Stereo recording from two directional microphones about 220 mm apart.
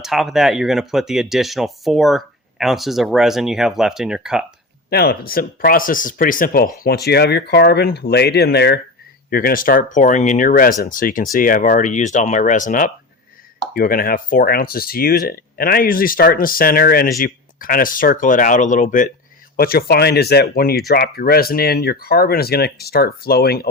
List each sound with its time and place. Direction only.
0.0 s speech: centre (ahead or behind)
4.9 s speech: 45° left (ahead or behind)